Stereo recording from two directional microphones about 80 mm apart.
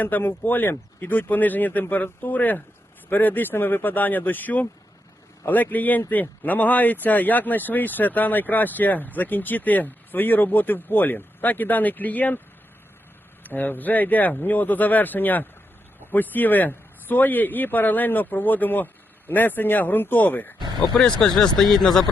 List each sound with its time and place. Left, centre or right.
0.0 s speech: left
13.4 s speech: left
21.2 s speech: centre